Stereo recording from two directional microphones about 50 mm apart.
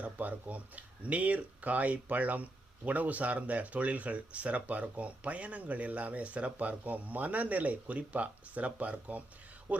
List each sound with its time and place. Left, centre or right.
0.0 s speech: right